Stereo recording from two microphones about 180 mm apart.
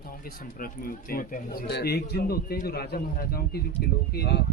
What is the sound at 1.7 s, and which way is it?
Speech, 65° left (ahead or behind).